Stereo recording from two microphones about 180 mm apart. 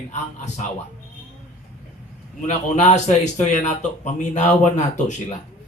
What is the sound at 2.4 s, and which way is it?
A man's voice, 40° left (ahead or behind).